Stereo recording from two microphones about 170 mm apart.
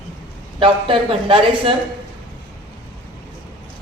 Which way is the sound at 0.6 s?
30° right (ahead or behind).